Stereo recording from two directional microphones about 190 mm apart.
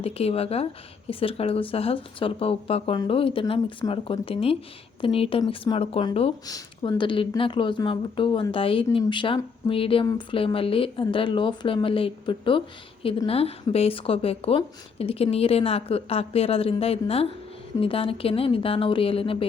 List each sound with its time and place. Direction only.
0.0 s speech: 30° left (ahead or behind)